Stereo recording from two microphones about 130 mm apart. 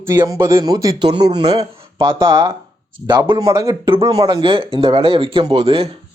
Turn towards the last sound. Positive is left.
turn(degrees=-50)  # may be behind; listen again after turning